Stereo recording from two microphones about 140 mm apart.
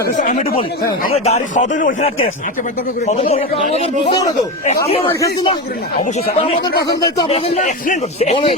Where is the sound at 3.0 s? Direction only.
50° left (ahead or behind).